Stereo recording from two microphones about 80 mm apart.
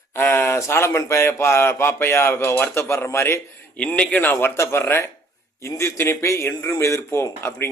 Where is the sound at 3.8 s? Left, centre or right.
Centre.